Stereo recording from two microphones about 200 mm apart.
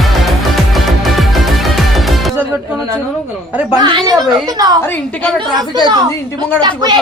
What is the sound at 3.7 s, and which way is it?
Speech, 20° right (ahead or behind).